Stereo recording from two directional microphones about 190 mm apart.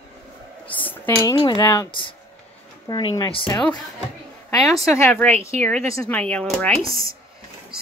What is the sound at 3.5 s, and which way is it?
Speech, 15° left (ahead or behind).